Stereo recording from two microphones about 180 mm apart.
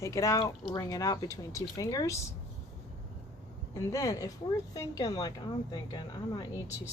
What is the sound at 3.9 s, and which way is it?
A woman's voice, 20° left (ahead or behind).